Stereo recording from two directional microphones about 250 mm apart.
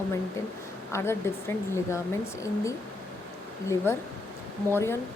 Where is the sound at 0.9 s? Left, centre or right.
Centre.